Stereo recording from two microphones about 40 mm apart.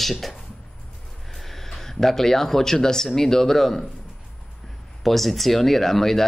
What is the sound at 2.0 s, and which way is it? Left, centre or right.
Speech, centre.